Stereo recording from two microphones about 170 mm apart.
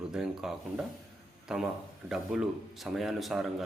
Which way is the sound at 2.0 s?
Centre (ahead or behind).